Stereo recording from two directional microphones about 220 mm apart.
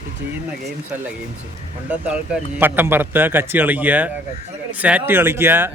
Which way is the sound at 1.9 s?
5° right (ahead or behind).